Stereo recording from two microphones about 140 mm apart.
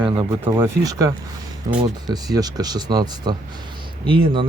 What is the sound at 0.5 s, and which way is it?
Speech, 20° right (ahead or behind).